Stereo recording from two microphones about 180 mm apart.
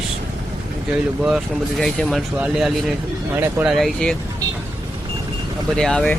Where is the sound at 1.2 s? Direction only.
Centre (ahead or behind).